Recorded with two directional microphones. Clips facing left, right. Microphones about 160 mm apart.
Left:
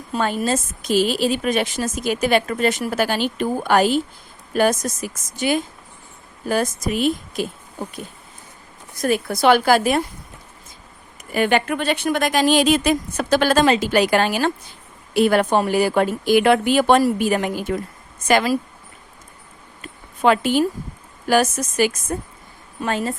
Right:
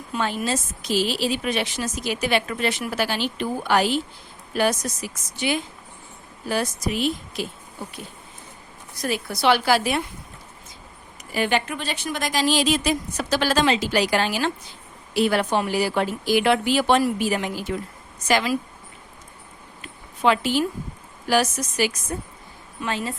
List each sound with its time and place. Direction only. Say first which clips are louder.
0.1 s a woman's voice: left 4 dB; 40° left (ahead or behind)
11.3 s a woman's voice: left 5 dB; 55° left (ahead or behind)
19.8 s a sound: left 3 dB; 50° left (ahead or behind)
21.2 s a woman's voice: left 3 dB; 50° left (ahead or behind)